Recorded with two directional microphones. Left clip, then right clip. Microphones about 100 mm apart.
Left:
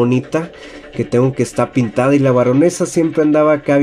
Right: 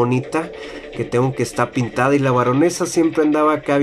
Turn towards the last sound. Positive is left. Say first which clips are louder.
# left 4 dB
turn(degrees=25)  # may be behind; listen again after turning